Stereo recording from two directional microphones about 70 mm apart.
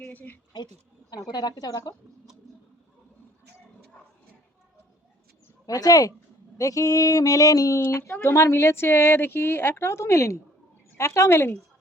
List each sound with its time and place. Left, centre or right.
0.1 s speech: left
1.1 s a woman's voice: left
5.6 s a sound: left
7.9 s speech: left